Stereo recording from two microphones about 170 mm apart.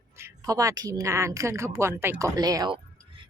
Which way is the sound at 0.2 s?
20° right (ahead or behind).